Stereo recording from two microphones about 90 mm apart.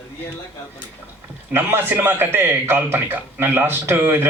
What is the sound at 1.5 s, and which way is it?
A man's voice, 20° right (ahead or behind).